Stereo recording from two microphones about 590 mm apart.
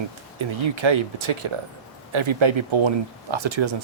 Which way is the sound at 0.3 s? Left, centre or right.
Right.